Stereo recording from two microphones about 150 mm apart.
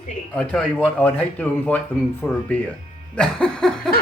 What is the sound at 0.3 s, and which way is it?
Speech, 5° left (ahead or behind).